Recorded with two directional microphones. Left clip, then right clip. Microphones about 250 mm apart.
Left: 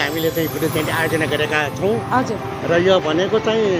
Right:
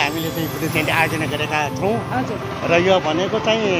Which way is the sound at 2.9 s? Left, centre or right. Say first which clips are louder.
Left 1 dB; centre.